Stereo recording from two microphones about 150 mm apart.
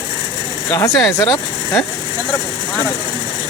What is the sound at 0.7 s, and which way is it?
Speech, 25° left (ahead or behind).